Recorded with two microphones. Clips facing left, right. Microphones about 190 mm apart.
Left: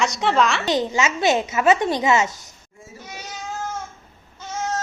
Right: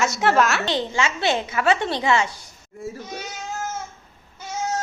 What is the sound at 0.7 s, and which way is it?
Speech, 20° left (ahead or behind).